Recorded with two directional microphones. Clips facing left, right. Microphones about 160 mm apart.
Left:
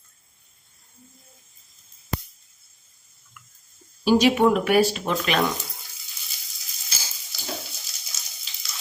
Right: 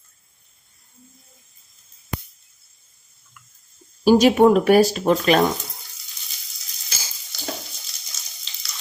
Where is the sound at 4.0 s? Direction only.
45° right (ahead or behind).